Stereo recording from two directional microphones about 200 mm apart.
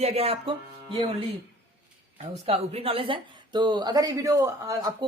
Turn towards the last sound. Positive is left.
turn(degrees=-15)  # may be behind; listen again after turning